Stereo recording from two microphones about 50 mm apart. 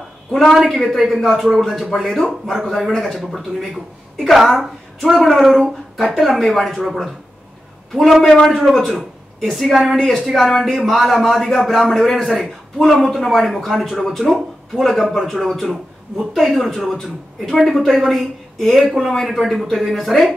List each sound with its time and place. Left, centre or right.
0.3 s a woman's voice: centre